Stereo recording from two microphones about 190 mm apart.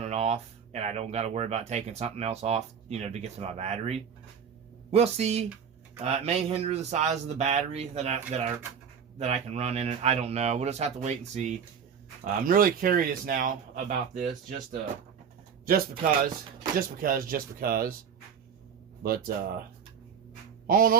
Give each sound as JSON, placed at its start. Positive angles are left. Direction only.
{"t": 0.0, "sound": "speech", "side_deg": -35}
{"t": 12.2, "sound": "speech", "side_deg": -45}
{"t": 16.7, "sound": "speech", "side_deg": -45}
{"t": 19.0, "sound": "speech", "side_deg": -50}
{"t": 20.7, "sound": "speech", "side_deg": -50}